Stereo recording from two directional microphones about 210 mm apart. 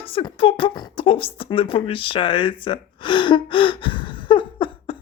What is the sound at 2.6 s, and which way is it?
Gasp, 25° left (ahead or behind).